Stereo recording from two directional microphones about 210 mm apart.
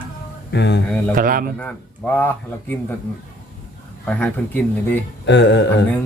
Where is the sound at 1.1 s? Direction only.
40° right (ahead or behind).